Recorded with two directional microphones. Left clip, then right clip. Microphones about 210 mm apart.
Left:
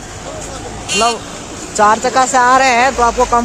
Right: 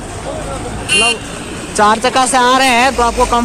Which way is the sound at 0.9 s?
35° left (ahead or behind).